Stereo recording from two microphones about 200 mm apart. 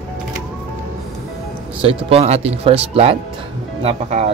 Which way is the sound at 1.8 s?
30° right (ahead or behind).